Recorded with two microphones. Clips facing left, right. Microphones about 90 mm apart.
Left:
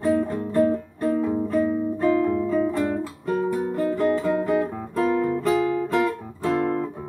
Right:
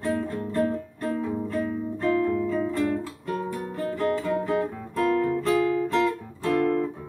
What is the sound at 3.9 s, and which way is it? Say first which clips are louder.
Music: left 2 dB; 25° left (ahead or behind).